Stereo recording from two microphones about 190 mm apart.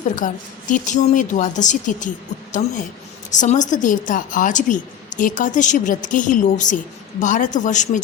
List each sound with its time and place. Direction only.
0.2 s a woman's voice: 40° left (ahead or behind)